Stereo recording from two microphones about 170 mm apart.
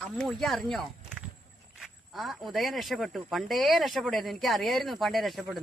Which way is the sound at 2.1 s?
Centre (ahead or behind).